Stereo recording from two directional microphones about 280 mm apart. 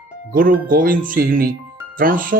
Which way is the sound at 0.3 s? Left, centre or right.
Right.